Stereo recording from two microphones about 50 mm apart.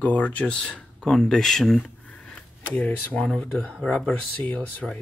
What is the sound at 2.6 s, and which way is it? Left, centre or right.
Speech, left.